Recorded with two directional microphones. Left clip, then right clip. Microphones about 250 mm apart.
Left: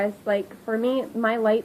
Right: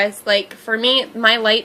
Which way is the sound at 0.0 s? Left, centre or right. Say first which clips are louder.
Right 7 dB; centre.